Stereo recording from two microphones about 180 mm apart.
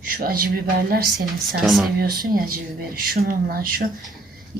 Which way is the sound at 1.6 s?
Centre (ahead or behind).